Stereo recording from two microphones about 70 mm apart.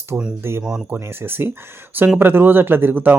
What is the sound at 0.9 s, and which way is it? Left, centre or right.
Speech, right.